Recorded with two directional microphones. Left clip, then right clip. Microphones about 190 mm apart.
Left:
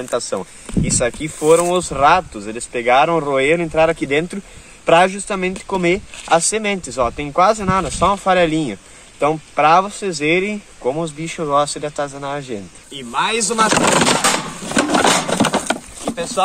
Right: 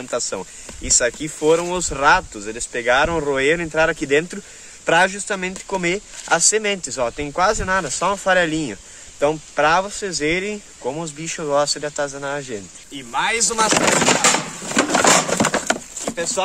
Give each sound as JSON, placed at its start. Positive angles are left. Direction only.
{"t": 0.1, "sound": "speech", "side_deg": -20}
{"t": 13.7, "sound": "skateboard", "side_deg": 15}
{"t": 14.9, "sound": "a sound", "side_deg": 0}